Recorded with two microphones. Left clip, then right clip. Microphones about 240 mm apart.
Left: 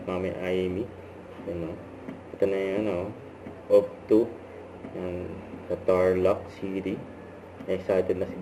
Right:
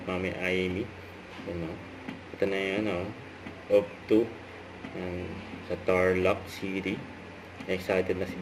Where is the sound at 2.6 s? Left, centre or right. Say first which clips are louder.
Left 2 dB; right.